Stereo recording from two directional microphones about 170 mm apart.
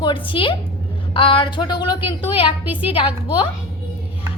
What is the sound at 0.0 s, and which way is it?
Speech, 30° left (ahead or behind).